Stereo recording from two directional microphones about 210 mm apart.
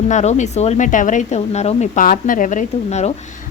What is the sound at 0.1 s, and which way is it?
A woman's voice, 35° left (ahead or behind).